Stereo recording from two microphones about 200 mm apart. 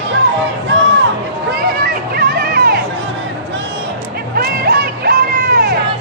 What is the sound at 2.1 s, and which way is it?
Music, 45° right (ahead or behind).